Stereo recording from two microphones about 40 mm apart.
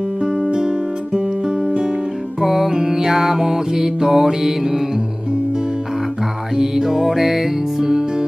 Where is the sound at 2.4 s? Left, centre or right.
Centre.